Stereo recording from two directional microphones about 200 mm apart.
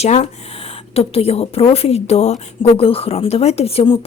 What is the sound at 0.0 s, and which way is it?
Speech, 30° left (ahead or behind).